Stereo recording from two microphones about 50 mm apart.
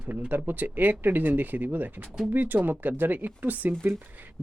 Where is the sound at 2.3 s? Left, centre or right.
Right.